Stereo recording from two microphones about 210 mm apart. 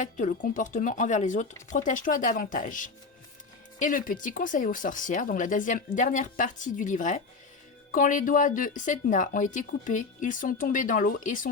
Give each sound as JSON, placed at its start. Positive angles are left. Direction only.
{"t": 0.0, "sound": "speech", "side_deg": 35}